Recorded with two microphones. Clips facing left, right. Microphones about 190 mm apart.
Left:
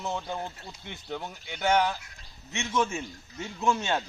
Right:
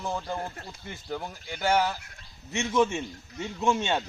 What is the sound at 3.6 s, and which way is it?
Speech, 25° right (ahead or behind).